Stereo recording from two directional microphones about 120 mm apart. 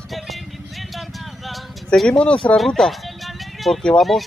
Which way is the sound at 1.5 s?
5° left (ahead or behind).